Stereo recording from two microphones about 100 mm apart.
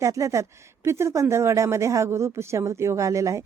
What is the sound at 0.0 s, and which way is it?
Speech, 30° right (ahead or behind).